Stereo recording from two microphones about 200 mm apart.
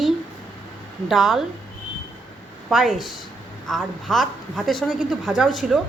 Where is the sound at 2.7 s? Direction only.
Centre (ahead or behind).